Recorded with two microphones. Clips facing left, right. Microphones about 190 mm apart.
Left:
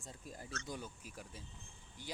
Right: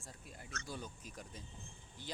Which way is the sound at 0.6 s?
10° left (ahead or behind).